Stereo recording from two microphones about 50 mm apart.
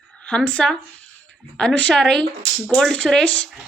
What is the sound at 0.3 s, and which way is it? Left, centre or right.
Speech, left.